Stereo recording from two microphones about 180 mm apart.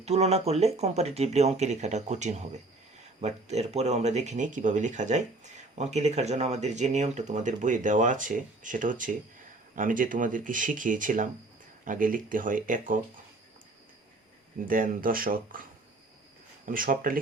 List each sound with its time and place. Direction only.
0.0 s speech: 35° right (ahead or behind)
14.6 s speech: 50° right (ahead or behind)
16.6 s speech: 50° right (ahead or behind)